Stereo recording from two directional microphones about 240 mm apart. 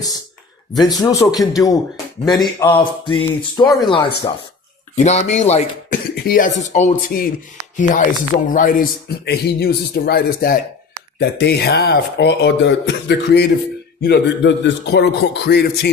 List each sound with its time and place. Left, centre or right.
0.8 s speech: centre
4.9 s a man's voice: left